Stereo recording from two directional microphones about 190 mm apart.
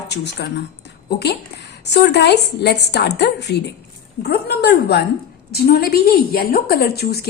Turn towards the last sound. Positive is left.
turn(degrees=55)  # may be behind; listen again after turning